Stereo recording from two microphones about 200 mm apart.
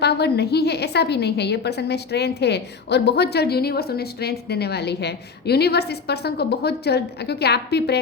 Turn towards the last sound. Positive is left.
turn(degrees=55)  # may be behind; listen again after turning